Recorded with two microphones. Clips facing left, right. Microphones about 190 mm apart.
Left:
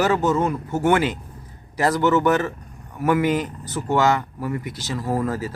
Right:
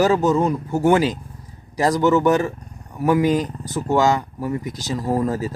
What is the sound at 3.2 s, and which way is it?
Speech, 40° right (ahead or behind).